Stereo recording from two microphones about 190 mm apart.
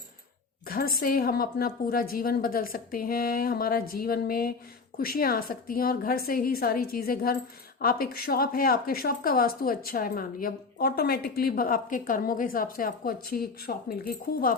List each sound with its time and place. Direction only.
0.7 s speech: 50° left (ahead or behind)